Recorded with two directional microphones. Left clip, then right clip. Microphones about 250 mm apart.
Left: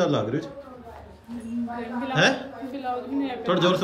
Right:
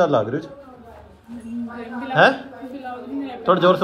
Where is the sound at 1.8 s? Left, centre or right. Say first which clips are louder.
Right 7 dB; centre.